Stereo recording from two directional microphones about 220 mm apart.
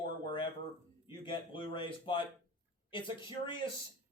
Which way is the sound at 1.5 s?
20° left (ahead or behind).